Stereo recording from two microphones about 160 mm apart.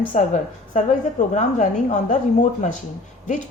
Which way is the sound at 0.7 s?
45° left (ahead or behind).